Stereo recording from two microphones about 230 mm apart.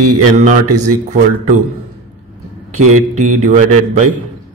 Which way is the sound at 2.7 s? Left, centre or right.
Right.